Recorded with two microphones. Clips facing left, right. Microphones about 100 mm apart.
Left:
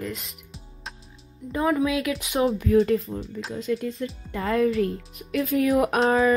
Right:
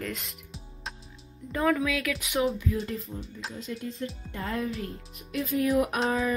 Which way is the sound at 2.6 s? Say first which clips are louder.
Left 12 dB; 90° left.